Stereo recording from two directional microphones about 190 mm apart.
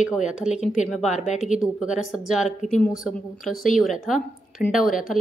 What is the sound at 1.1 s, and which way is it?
Speech, 40° left (ahead or behind).